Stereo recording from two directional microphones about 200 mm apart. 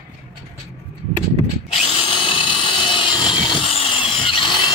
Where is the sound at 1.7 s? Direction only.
25° left (ahead or behind).